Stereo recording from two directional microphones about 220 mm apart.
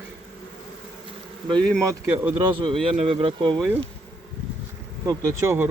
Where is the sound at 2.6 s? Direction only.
25° right (ahead or behind).